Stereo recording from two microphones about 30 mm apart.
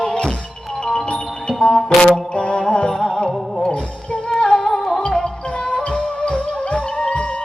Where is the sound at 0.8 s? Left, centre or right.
Left.